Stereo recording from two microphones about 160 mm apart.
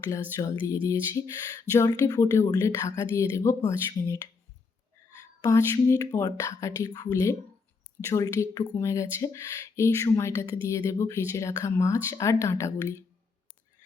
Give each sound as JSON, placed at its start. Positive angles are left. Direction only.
{"t": 0.3, "sound": "speech", "side_deg": 20}
{"t": 5.4, "sound": "speech", "side_deg": 20}